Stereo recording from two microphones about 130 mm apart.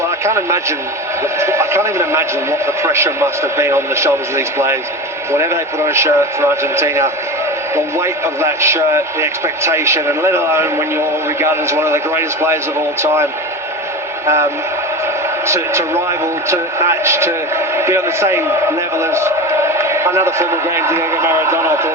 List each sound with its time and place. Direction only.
0.3 s a man's voice: 20° right (ahead or behind)
15.4 s a man's voice: 20° right (ahead or behind)